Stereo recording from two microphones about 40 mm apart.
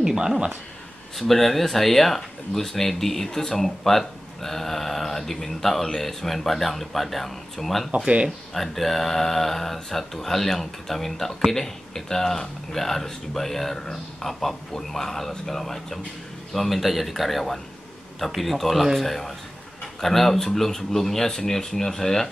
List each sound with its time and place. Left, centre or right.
0.0 s speech: centre
1.1 s speech: centre